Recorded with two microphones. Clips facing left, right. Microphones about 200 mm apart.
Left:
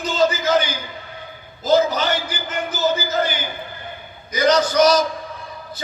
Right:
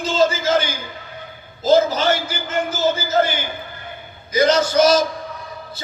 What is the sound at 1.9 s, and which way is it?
A man's voice, 25° right (ahead or behind).